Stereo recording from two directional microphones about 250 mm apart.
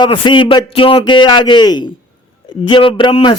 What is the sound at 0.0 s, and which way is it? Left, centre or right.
A man's voice, centre.